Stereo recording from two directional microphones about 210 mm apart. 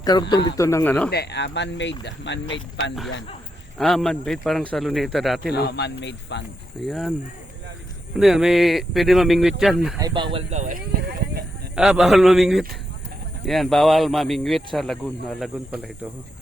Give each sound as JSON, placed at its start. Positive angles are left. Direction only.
{"t": 0.0, "sound": "speech", "side_deg": 20}
{"t": 1.1, "sound": "speech", "side_deg": 50}
{"t": 3.8, "sound": "speech", "side_deg": 0}
{"t": 5.5, "sound": "speech", "side_deg": 50}
{"t": 6.8, "sound": "speech", "side_deg": 0}
{"t": 8.1, "sound": "speech", "side_deg": 0}
{"t": 10.0, "sound": "speech", "side_deg": -20}
{"t": 11.7, "sound": "speech", "side_deg": 0}